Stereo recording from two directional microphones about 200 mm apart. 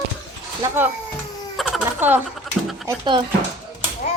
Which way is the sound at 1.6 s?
5° right (ahead or behind).